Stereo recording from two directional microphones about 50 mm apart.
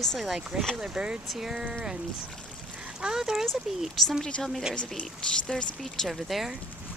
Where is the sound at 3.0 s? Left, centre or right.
Centre.